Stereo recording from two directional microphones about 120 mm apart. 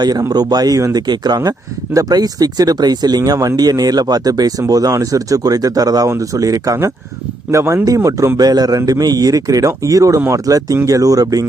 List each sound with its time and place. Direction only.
0.0 s a man's voice: 30° right (ahead or behind)